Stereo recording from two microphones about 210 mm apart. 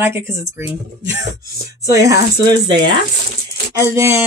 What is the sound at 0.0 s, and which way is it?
Speech, 10° right (ahead or behind).